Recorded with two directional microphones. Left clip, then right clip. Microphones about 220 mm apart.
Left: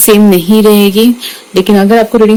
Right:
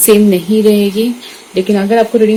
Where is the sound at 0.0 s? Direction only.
45° left (ahead or behind).